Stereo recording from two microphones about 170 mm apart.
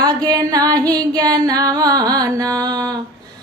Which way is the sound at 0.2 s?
20° right (ahead or behind).